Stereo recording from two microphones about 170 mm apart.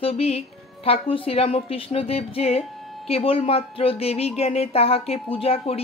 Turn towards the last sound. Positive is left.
turn(degrees=35)  # may be behind; listen again after turning